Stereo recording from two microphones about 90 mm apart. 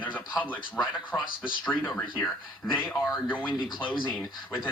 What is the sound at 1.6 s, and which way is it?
Speech, 20° left (ahead or behind).